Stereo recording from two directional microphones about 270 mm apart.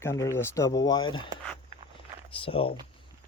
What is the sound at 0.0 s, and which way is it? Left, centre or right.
Speech, centre.